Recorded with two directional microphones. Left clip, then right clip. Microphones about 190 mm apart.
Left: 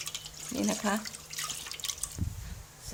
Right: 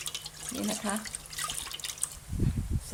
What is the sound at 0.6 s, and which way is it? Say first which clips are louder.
Speech: left 3 dB; 20° left (ahead or behind).